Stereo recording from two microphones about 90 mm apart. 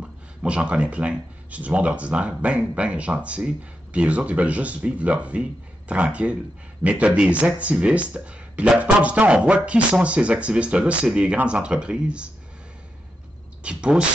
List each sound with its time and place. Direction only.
0.0 s speech: 10° right (ahead or behind)
13.6 s speech: 10° right (ahead or behind)